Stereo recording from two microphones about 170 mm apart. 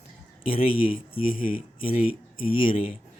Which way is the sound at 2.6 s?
30° left (ahead or behind).